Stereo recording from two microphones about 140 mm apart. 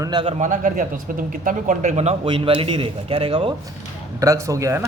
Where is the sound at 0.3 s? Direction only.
60° right (ahead or behind).